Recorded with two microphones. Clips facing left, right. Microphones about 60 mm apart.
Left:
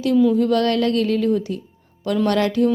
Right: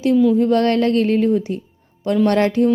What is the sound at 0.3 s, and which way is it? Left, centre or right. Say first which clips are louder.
A woman's voice: right 2 dB; right.